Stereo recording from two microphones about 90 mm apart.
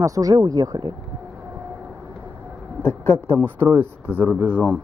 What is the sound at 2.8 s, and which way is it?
Speech, 25° left (ahead or behind).